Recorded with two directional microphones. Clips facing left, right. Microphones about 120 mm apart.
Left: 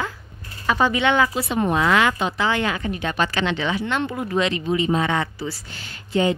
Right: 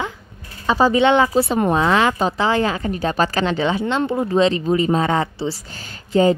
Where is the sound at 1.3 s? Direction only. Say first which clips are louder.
Right 5 dB; 35° right (ahead or behind).